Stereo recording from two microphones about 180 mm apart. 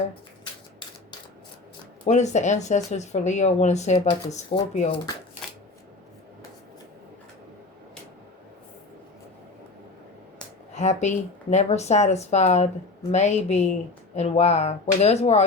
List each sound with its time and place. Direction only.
2.0 s speech: 40° left (ahead or behind)
10.8 s speech: 40° left (ahead or behind)